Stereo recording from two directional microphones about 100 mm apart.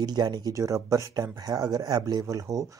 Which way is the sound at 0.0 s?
45° right (ahead or behind).